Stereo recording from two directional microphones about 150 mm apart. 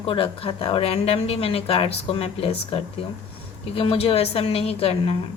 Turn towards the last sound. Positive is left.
turn(degrees=40)  # may be behind; listen again after turning